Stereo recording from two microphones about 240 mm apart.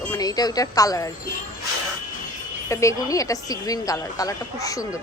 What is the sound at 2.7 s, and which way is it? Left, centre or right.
A woman's voice, centre.